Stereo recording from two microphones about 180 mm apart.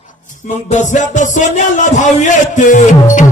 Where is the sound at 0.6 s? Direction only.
45° left (ahead or behind).